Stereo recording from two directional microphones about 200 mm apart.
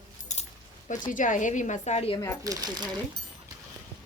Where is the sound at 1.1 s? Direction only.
40° left (ahead or behind).